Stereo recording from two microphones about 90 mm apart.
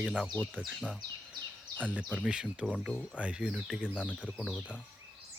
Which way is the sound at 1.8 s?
15° right (ahead or behind).